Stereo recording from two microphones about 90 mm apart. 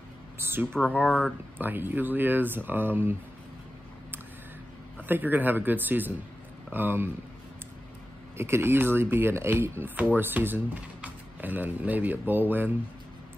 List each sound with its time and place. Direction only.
0.4 s speech: 25° right (ahead or behind)
0.7 s speech: 15° left (ahead or behind)
1.6 s speech: 20° right (ahead or behind)
5.0 s speech: 20° right (ahead or behind)
8.4 s speech: 30° right (ahead or behind)